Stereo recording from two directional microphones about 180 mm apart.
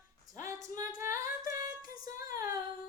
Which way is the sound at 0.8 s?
15° right (ahead or behind).